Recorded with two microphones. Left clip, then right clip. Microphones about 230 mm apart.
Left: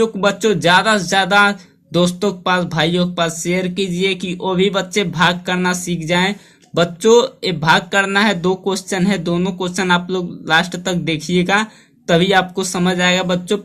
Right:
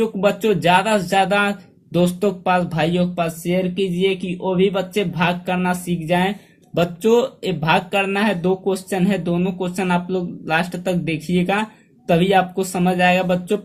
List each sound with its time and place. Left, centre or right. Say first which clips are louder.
0.0 s speech: left 3 dB; left